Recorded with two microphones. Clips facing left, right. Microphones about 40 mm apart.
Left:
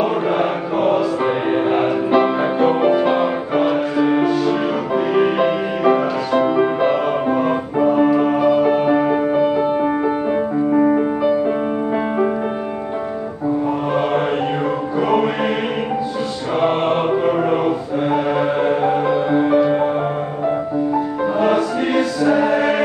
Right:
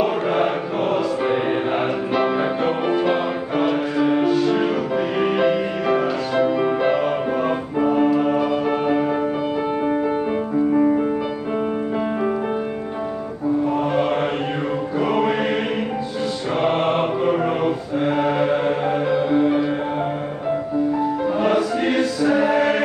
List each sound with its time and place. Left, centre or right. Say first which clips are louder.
0.0 s music: left 2 dB; centre
15.0 s music: left 2 dB; centre
16.6 s music: left 2 dB; centre
21.4 s music: left 3 dB; centre